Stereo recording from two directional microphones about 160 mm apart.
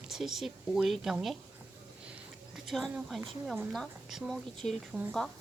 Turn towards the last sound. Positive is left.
turn(degrees=0)  # may be behind; listen again after turning